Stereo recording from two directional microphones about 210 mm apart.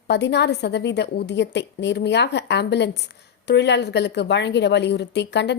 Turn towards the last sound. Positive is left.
turn(degrees=55)  # may be behind; listen again after turning